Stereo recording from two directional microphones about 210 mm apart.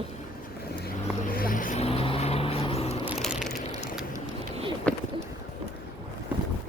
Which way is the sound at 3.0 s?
5° right (ahead or behind).